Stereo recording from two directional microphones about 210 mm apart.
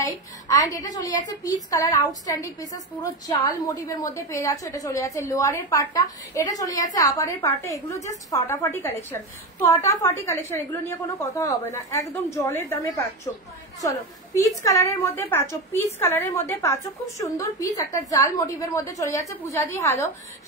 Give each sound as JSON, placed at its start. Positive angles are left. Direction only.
{"t": 0.0, "sound": "a woman's voice", "side_deg": 15}
{"t": 14.4, "sound": "a woman's voice", "side_deg": 15}